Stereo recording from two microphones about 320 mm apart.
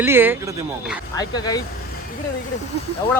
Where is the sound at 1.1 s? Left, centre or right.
Centre.